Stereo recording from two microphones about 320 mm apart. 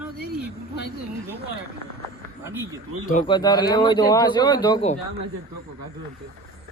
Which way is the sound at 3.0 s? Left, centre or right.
Centre.